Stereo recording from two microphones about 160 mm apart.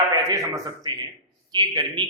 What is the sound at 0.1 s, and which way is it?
A man's voice, 20° right (ahead or behind).